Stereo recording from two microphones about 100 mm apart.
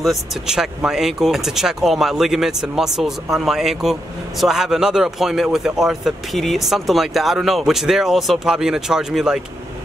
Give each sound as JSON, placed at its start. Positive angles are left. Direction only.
{"t": 0.0, "sound": "speech", "side_deg": 0}